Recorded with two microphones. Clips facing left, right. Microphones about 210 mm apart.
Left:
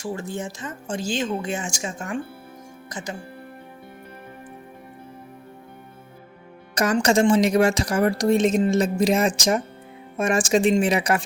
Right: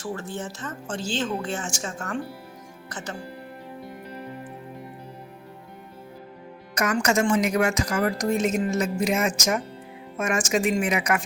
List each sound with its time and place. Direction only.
0.0 s speech: 10° left (ahead or behind)
6.7 s a woman's voice: 30° left (ahead or behind)